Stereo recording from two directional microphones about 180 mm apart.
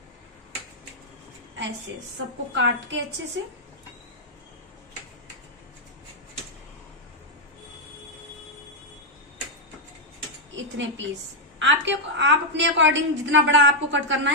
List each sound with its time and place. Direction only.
2.5 s a woman's voice: 90° right
10.5 s a sound: 90° right
11.6 s a woman's voice: 85° right